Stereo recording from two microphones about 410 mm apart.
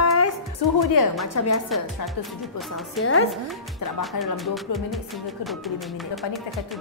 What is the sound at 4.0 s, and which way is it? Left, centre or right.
Speech, centre.